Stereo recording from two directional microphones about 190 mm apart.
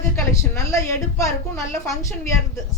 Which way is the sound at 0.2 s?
15° left (ahead or behind).